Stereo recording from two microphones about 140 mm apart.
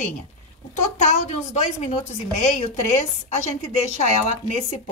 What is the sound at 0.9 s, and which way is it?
A woman's voice, 60° left (ahead or behind).